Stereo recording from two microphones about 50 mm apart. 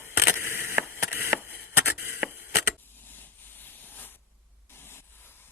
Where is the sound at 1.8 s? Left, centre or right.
Right.